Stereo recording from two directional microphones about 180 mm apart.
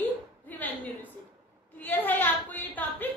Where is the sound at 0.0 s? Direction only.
10° left (ahead or behind).